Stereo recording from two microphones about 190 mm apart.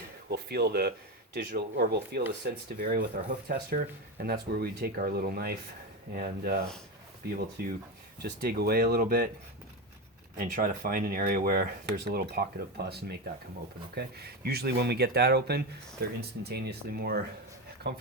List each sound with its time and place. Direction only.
0.3 s speech: 55° right (ahead or behind)
8.2 s speech: 55° right (ahead or behind)
10.3 s speech: 50° right (ahead or behind)